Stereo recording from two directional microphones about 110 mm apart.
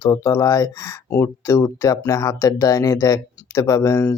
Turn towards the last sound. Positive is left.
turn(degrees=30)  # may be behind; listen again after turning